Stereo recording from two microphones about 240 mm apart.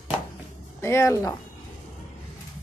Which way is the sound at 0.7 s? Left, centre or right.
Centre.